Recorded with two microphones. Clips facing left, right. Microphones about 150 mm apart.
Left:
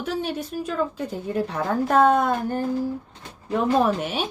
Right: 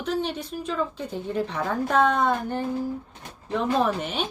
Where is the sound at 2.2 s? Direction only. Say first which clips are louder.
Left 1 dB; 5° left (ahead or behind).